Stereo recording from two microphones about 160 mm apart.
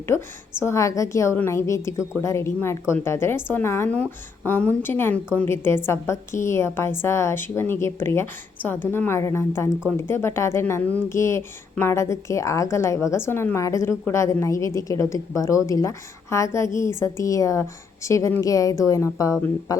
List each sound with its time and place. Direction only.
0.6 s a woman's voice: 20° left (ahead or behind)